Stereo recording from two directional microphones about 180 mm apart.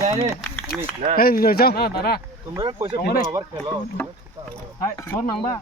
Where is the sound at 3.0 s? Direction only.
60° left (ahead or behind).